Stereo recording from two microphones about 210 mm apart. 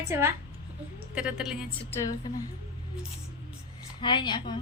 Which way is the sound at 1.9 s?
15° left (ahead or behind).